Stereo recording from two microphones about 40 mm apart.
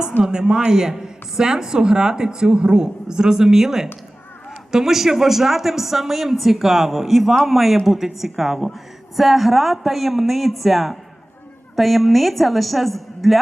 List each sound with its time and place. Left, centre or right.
0.2 s a man's voice: centre